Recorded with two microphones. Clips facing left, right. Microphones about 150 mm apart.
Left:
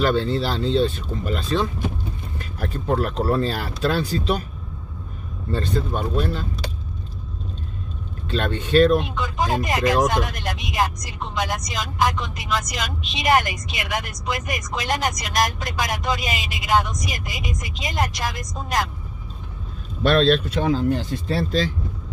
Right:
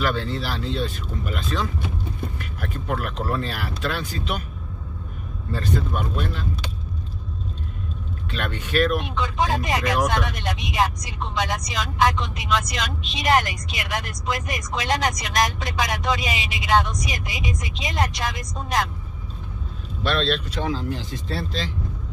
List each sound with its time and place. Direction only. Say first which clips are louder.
0.0 s speech: left 5 dB; 30° left (ahead or behind)
5.5 s speech: left 2 dB; 30° left (ahead or behind)
8.3 s speech: left 7 dB; 30° left (ahead or behind)
9.0 s speech: even; centre (ahead or behind)
20.0 s speech: left 6 dB; 45° left (ahead or behind)